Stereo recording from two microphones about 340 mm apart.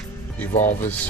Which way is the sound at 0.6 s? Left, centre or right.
Centre.